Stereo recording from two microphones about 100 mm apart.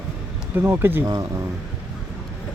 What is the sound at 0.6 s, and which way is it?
Speech, 20° right (ahead or behind).